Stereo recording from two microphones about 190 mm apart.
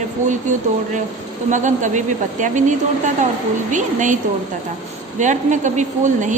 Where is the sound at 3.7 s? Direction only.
40° right (ahead or behind).